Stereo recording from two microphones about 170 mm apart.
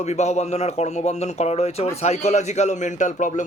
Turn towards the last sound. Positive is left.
turn(degrees=45)  # may be behind; listen again after turning